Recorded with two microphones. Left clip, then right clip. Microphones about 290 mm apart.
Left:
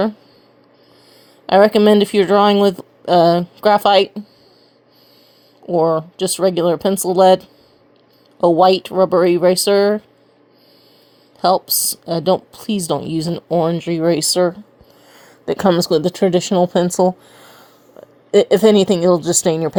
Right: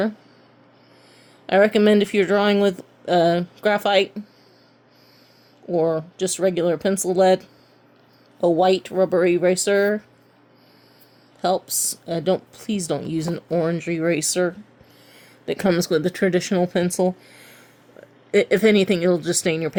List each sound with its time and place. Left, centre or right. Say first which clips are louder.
1.5 s speech: left 5 dB; centre
5.6 s speech: left 6 dB; centre
11.3 s speech: left 7 dB; left
15.6 s speech: left 6 dB; centre
18.3 s speech: left 6 dB; centre